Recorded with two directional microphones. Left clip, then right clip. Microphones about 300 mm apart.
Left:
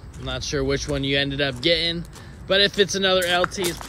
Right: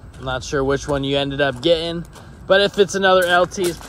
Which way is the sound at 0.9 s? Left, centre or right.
Right.